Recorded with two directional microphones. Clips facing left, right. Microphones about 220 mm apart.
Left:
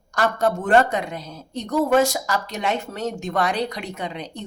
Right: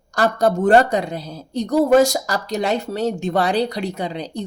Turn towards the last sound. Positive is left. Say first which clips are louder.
# right 5 dB
turn(degrees=-35)  # may be behind; listen again after turning